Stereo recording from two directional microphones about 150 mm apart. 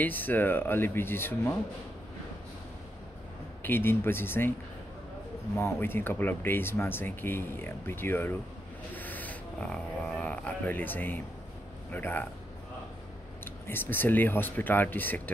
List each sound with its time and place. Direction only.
0.0 s speech: 10° left (ahead or behind)
3.6 s speech: 15° left (ahead or behind)
5.6 s speech: 15° left (ahead or behind)
13.7 s speech: 15° left (ahead or behind)